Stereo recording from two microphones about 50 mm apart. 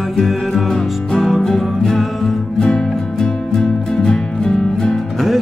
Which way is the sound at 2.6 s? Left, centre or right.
Centre.